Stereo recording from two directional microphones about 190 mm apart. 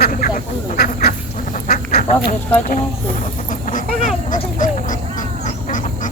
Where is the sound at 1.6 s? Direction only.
50° left (ahead or behind).